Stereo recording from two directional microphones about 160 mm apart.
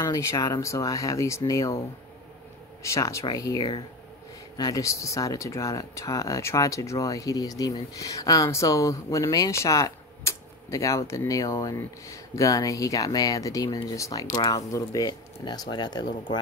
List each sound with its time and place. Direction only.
0.0 s speech: 20° left (ahead or behind)
2.8 s speech: 20° left (ahead or behind)